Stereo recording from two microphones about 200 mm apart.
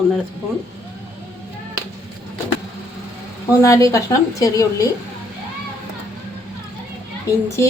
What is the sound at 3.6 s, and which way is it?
A woman's voice, 15° left (ahead or behind).